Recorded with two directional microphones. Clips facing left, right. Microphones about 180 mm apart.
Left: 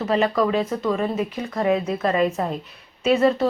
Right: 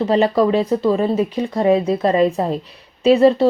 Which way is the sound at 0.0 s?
30° right (ahead or behind).